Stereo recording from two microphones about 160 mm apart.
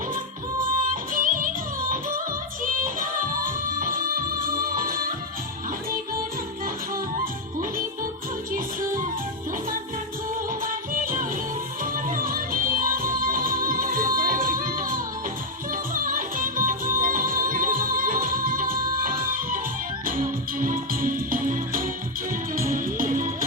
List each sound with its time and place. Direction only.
1.1 s music: 55° right (ahead or behind)
2.8 s music: 60° right (ahead or behind)
10.7 s music: 60° right (ahead or behind)